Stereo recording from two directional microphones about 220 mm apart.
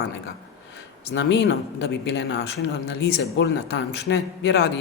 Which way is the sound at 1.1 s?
55° left (ahead or behind).